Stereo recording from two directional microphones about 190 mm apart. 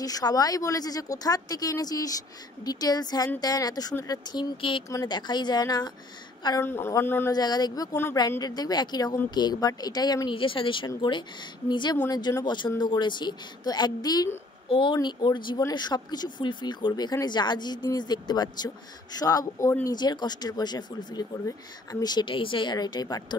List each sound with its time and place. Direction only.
0.0 s speech: 20° left (ahead or behind)